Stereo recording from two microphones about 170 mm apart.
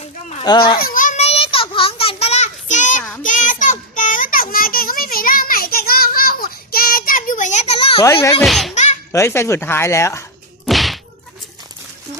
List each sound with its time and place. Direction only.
0.4 s a child's voice: 25° left (ahead or behind)
0.8 s a sound: 55° left (ahead or behind); by 8.0 s 35° left (ahead or behind)
8.0 s speech: 15° left (ahead or behind)
8.4 s a child's voice: centre (ahead or behind)
8.7 s a sound: 45° left (ahead or behind)
9.1 s speech: 15° left (ahead or behind)
10.7 s whack: centre (ahead or behind)